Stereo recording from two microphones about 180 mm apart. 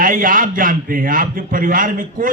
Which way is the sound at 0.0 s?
50° right (ahead or behind).